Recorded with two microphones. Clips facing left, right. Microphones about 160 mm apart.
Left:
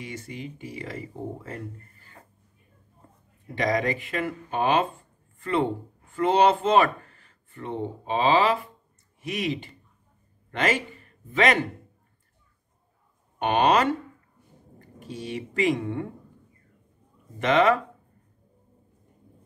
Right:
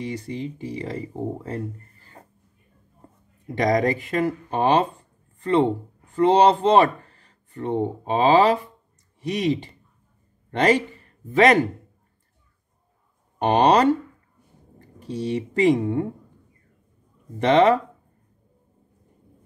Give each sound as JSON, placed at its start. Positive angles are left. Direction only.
{"t": 0.0, "sound": "speech", "side_deg": -35}
{"t": 3.5, "sound": "a man's voice", "side_deg": -40}
{"t": 13.4, "sound": "speech", "side_deg": -35}
{"t": 17.4, "sound": "speech", "side_deg": -35}